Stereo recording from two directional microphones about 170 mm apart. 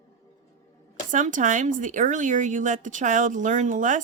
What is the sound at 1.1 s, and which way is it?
Speech, 50° right (ahead or behind).